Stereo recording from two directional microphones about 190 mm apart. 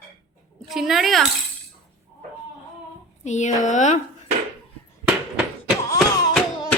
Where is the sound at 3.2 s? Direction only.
40° left (ahead or behind).